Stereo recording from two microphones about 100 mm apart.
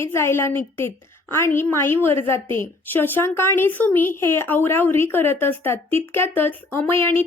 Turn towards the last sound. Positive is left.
turn(degrees=20)  # may be behind; listen again after turning